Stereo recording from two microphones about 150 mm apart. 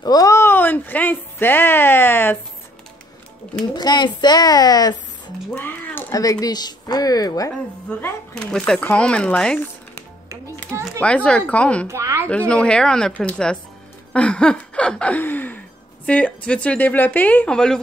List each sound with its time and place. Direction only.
0.0 s speech: 25° left (ahead or behind)
3.7 s speech: 30° left (ahead or behind)
5.6 s a sound: 15° left (ahead or behind)
6.1 s speech: 25° left (ahead or behind)
8.0 s speech: 5° left (ahead or behind)
11.9 s speech: 20° right (ahead or behind)
12.3 s speech: 5° left (ahead or behind)